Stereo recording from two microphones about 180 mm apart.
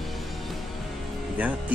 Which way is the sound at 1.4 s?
10° right (ahead or behind).